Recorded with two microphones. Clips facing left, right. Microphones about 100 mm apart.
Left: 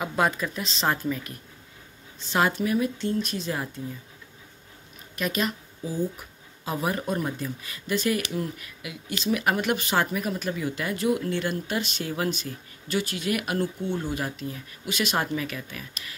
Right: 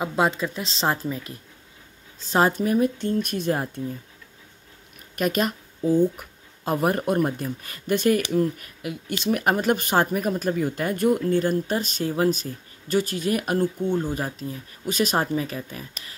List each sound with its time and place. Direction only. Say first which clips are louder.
0.0 s a woman's voice: right 2 dB; 25° right (ahead or behind)
2.2 s speech: right 3 dB; 40° right (ahead or behind)
5.1 s speech: right 4 dB; 45° right (ahead or behind)